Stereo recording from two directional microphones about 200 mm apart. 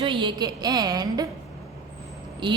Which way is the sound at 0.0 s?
25° right (ahead or behind).